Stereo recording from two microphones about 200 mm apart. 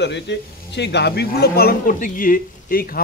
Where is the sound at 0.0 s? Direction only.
60° left (ahead or behind).